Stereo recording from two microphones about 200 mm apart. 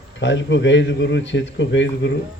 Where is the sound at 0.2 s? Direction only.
65° left (ahead or behind).